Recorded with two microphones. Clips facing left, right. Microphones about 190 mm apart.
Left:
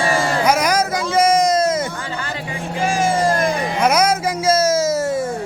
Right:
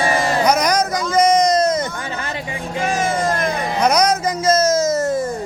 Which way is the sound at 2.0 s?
20° right (ahead or behind).